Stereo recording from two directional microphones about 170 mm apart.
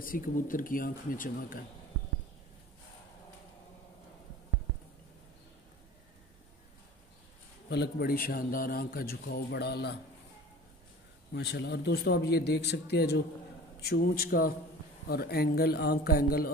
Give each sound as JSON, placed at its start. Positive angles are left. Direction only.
{"t": 0.0, "sound": "speech", "side_deg": 55}
{"t": 7.7, "sound": "speech", "side_deg": 70}
{"t": 11.3, "sound": "speech", "side_deg": 85}